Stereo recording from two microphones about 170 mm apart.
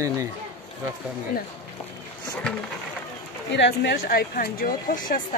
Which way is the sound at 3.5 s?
85° left.